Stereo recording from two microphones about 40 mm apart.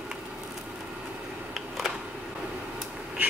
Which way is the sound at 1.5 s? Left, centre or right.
Centre.